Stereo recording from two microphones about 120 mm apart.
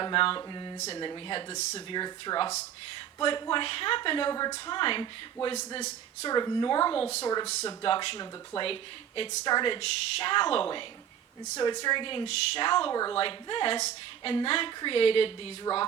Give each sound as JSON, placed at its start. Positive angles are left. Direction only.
{"t": 0.0, "sound": "speech", "side_deg": 45}
{"t": 7.8, "sound": "speech", "side_deg": 45}
{"t": 9.4, "sound": "speech", "side_deg": 35}
{"t": 11.5, "sound": "speech", "side_deg": 35}
{"t": 12.9, "sound": "speech", "side_deg": 30}
{"t": 13.1, "sound": "speech", "side_deg": 45}
{"t": 13.7, "sound": "a woman's voice", "side_deg": 65}
{"t": 14.3, "sound": "speech", "side_deg": 50}